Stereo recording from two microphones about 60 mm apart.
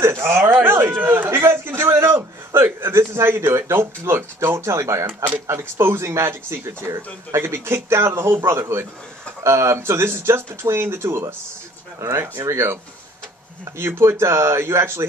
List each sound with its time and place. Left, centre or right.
0.0 s speech: right
0.7 s a sound: right
2.5 s speech: right
5.0 s speech: right
13.7 s speech: right